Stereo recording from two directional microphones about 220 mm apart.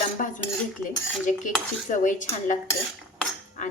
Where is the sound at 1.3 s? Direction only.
30° left (ahead or behind).